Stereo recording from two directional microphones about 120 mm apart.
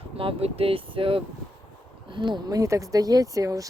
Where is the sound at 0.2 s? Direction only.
55° right (ahead or behind).